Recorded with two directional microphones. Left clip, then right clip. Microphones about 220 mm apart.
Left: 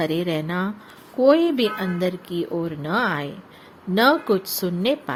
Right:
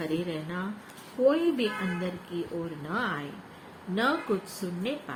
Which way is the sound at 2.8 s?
50° left (ahead or behind).